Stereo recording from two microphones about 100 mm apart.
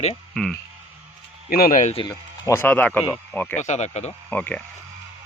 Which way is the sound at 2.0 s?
55° left (ahead or behind).